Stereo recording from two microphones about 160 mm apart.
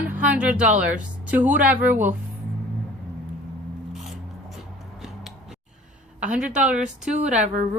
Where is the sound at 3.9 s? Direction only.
Centre (ahead or behind).